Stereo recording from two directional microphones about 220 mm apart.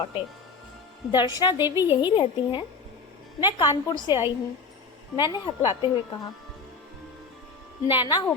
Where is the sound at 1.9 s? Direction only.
20° left (ahead or behind).